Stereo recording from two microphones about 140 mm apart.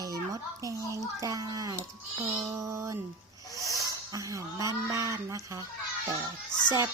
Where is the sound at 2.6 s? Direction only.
20° right (ahead or behind).